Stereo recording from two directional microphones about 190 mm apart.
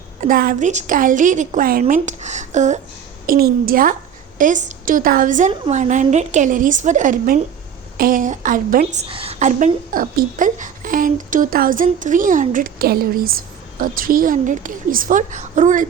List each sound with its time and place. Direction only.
0.2 s a woman's voice: 50° right (ahead or behind)
3.2 s a woman's voice: 50° right (ahead or behind)
9.0 s a woman's voice: 30° right (ahead or behind)